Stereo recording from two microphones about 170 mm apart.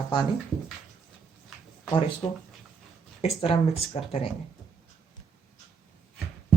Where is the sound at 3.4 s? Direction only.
35° left (ahead or behind).